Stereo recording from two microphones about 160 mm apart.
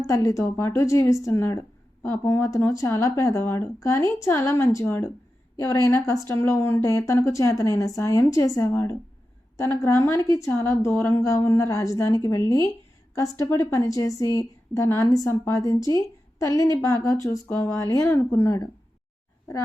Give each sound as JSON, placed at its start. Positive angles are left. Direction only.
{"t": 0.1, "sound": "a woman's voice", "side_deg": 20}